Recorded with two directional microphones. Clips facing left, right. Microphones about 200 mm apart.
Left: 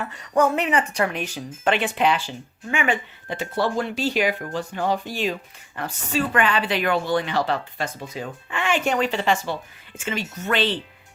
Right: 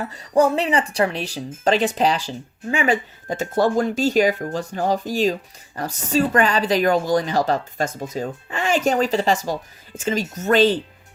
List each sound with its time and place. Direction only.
0.0 s speech: 35° right (ahead or behind)